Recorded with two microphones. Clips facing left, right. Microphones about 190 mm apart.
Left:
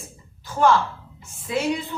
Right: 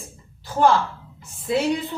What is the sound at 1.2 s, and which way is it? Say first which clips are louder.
Speech: right 4 dB; 35° right (ahead or behind).